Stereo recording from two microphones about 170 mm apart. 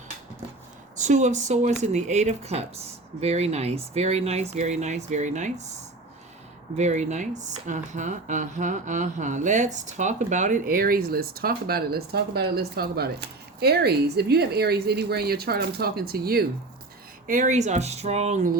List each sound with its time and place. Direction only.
0.9 s speech: 45° right (ahead or behind)
6.7 s speech: 45° right (ahead or behind); by 16.5 s 65° right (ahead or behind)
17.2 s speech: 45° right (ahead or behind)